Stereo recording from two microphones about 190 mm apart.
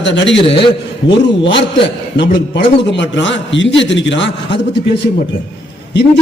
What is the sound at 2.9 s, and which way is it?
A man's voice, 70° left (ahead or behind).